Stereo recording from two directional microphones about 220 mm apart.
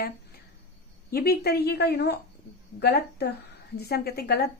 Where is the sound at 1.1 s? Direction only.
45° left (ahead or behind).